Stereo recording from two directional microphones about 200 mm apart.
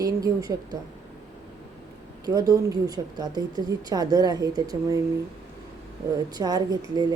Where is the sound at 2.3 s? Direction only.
20° right (ahead or behind).